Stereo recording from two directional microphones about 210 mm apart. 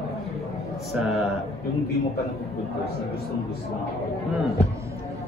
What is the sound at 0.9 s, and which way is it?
Speech, centre (ahead or behind).